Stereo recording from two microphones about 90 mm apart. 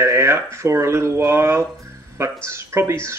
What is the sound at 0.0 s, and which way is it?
A man's voice, 30° right (ahead or behind).